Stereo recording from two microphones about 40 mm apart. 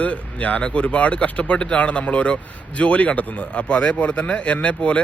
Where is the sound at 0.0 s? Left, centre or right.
Left.